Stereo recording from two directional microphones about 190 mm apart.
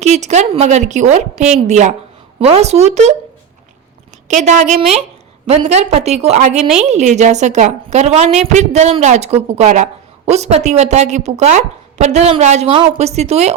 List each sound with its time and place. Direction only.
0.0 s a woman's voice: 35° right (ahead or behind)
4.3 s a woman's voice: 40° right (ahead or behind)